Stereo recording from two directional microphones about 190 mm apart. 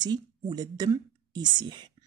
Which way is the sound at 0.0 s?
20° right (ahead or behind).